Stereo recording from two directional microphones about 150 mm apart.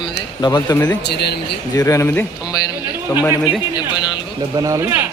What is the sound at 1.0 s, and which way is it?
Speech, 90° left.